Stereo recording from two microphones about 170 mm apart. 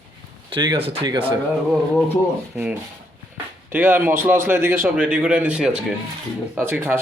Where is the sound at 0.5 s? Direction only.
30° right (ahead or behind).